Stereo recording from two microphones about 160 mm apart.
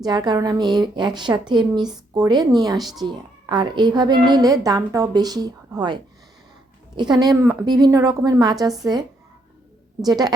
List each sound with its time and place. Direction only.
0.0 s a woman's voice: 25° right (ahead or behind)